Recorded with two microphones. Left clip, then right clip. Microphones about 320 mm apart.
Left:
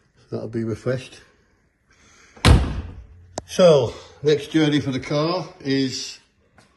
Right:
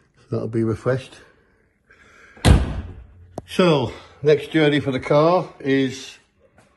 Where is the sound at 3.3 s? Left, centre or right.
Centre.